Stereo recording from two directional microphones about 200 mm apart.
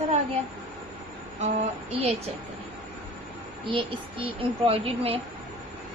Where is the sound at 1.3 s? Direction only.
30° right (ahead or behind).